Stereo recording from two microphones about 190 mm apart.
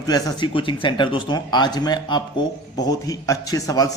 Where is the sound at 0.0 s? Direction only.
20° left (ahead or behind).